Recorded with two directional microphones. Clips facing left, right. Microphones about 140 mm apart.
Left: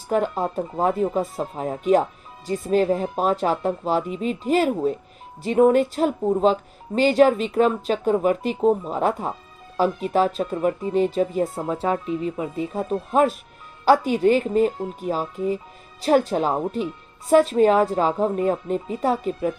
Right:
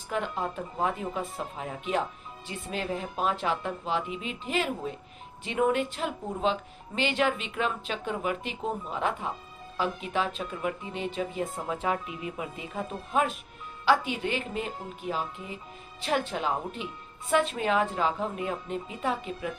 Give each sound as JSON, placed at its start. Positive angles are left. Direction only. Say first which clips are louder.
{"t": 0.1, "sound": "speech", "louder": "left 9 dB", "side_deg": 40}